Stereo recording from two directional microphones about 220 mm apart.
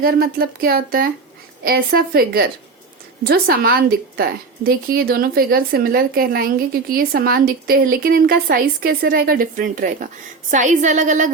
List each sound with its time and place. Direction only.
0.0 s a woman's voice: 45° right (ahead or behind)